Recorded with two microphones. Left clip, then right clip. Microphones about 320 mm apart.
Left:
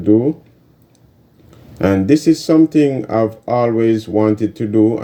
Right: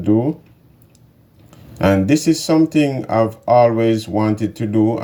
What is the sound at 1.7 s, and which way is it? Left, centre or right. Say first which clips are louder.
Speech: left 1 dB; centre.